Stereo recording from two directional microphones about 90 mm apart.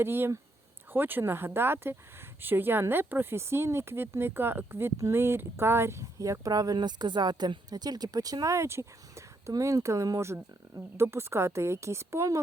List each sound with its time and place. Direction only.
0.0 s speech: 25° right (ahead or behind)